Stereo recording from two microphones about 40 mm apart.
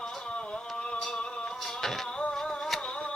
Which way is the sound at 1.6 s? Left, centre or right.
Centre.